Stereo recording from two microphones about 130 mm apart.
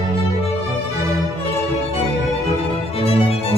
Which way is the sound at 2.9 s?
45° left (ahead or behind).